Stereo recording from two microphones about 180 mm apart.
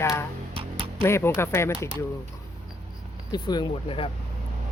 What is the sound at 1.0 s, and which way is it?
Speech, 15° left (ahead or behind).